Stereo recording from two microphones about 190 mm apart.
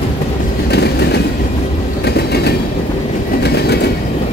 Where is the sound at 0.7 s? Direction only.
60° left (ahead or behind).